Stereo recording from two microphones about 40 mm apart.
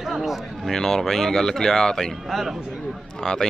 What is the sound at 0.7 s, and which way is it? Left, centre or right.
Speech, centre.